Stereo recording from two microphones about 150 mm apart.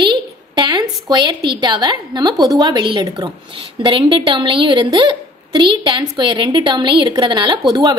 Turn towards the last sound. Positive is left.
turn(degrees=-25)  # may be behind; listen again after turning